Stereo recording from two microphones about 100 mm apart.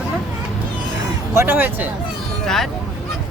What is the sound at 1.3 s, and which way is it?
Speech, 25° right (ahead or behind).